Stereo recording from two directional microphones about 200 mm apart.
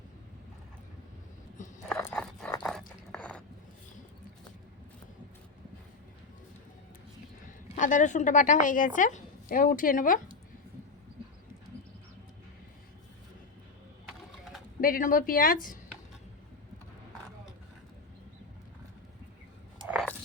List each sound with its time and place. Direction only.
1.9 s a sound: 5° left (ahead or behind)
7.4 s a woman's voice: 40° left (ahead or behind)
14.8 s a woman's voice: 45° left (ahead or behind)